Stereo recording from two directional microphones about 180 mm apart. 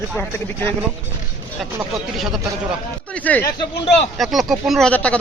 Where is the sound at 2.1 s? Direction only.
Centre (ahead or behind).